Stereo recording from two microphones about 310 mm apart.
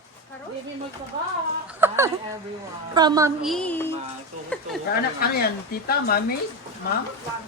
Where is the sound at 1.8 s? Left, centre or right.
Centre.